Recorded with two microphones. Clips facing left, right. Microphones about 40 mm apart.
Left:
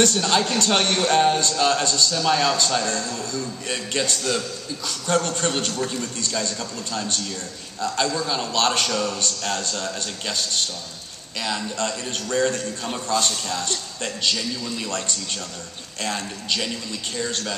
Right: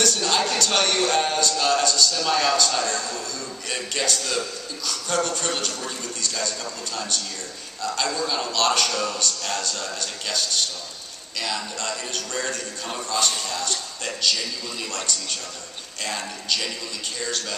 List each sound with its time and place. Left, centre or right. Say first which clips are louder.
0.0 s a man's voice: left 2 dB; left
2.1 s a man's voice: left 1 dB; left
2.8 s a man's voice: even; right
3.6 s a man's voice: even; left
13.1 s a man's voice: left 2 dB; right
13.5 s a man's voice: left 1 dB; left